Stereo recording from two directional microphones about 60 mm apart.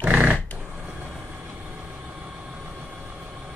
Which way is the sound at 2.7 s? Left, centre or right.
Right.